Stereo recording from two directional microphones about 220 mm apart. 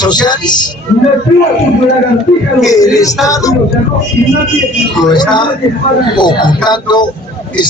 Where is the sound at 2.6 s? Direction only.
15° left (ahead or behind).